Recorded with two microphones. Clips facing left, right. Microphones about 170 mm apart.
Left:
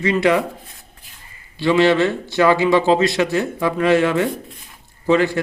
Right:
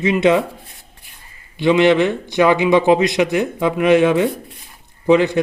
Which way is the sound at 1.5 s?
20° right (ahead or behind).